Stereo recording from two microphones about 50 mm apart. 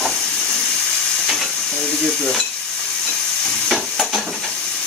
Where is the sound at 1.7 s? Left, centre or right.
Centre.